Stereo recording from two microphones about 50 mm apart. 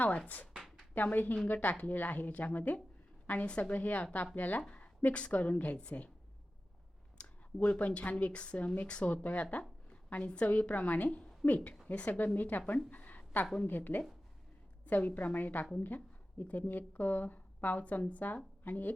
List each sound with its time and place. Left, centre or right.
0.9 s a woman's voice: left
7.2 s clicking: left
7.6 s a woman's voice: left